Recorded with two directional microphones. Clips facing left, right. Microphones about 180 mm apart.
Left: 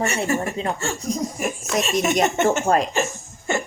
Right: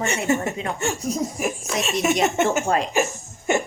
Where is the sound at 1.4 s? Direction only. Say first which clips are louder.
Left 1 dB; centre (ahead or behind).